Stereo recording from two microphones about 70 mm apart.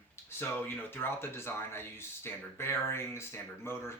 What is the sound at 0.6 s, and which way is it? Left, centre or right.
Speech, left.